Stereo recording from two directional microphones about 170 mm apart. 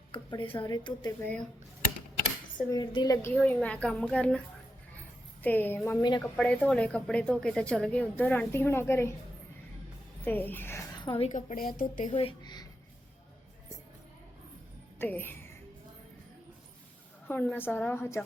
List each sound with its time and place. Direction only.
0.1 s a woman's voice: 30° left (ahead or behind)
2.6 s speech: 25° left (ahead or behind)
6.0 s a woman's voice: 25° left (ahead or behind)
6.2 s speech: 5° left (ahead or behind)
10.2 s speech: 10° left (ahead or behind)
11.0 s a woman's voice: 30° left (ahead or behind)
11.3 s speech: 45° left (ahead or behind)
12.1 s a woman's voice: 30° left (ahead or behind)
14.9 s music: 10° left (ahead or behind)
17.4 s speech: 10° left (ahead or behind)